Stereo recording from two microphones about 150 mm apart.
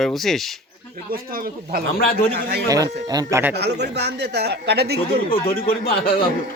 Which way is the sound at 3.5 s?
90° right.